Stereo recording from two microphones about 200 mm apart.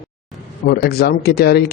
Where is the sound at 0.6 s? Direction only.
55° left (ahead or behind).